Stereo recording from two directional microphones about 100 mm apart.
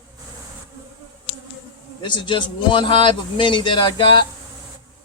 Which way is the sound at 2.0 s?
50° left (ahead or behind).